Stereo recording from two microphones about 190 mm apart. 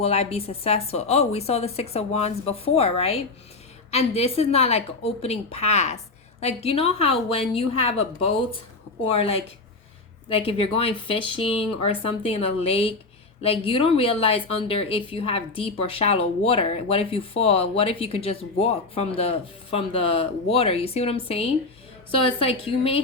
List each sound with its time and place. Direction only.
0.0 s a woman's voice: 35° left (ahead or behind)